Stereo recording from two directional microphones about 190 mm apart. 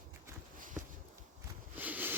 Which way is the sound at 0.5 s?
45° right (ahead or behind).